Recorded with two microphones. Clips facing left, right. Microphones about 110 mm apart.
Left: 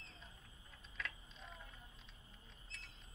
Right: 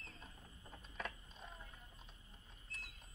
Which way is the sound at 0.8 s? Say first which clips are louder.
Right 2 dB; 50° right (ahead or behind).